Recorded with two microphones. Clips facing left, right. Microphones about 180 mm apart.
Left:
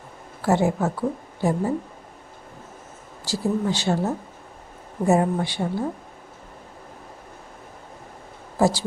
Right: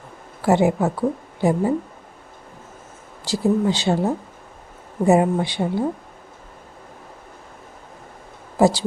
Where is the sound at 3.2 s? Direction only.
20° right (ahead or behind).